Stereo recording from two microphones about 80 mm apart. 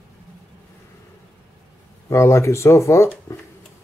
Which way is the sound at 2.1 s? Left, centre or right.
Left.